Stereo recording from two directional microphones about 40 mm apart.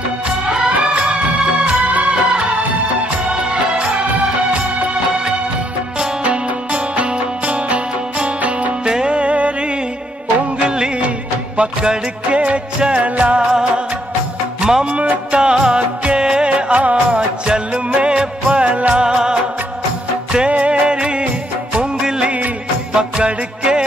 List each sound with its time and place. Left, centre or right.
0.5 s music: right
1.1 s music of bollywood: right
6.2 s music: right
8.8 s music: right
11.5 s music: right
13.4 s music: centre; by 17.2 s right
17.5 s music: right
18.9 s music: right
20.4 s music: right
22.9 s music: right